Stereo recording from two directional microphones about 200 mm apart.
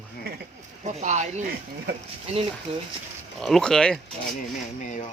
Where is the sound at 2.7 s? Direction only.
30° right (ahead or behind).